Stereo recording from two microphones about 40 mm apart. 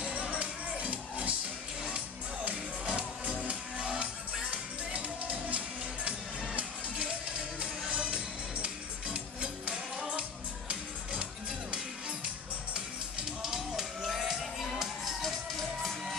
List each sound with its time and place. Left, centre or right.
0.0 s music: right
2.8 s music: right
13.4 s music: centre
15.8 s music: centre